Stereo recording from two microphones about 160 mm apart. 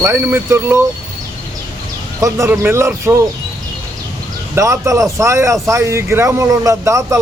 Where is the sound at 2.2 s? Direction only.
15° right (ahead or behind).